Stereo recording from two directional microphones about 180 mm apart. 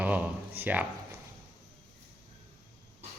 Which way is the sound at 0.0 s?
10° right (ahead or behind).